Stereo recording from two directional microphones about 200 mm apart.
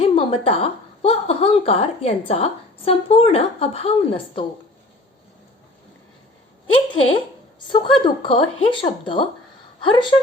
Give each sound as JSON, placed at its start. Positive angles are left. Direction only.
{"t": 0.0, "sound": "a woman's voice", "side_deg": 30}
{"t": 6.7, "sound": "a woman's voice", "side_deg": 25}